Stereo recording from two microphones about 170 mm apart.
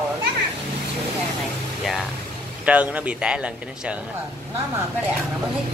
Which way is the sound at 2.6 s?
5° right (ahead or behind).